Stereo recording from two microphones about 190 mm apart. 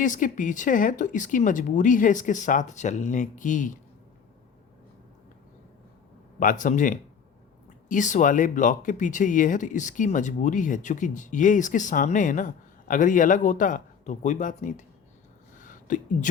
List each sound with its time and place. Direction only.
0.0 s speech: 45° left (ahead or behind)
6.4 s speech: 45° left (ahead or behind)
15.5 s a sound: 45° left (ahead or behind)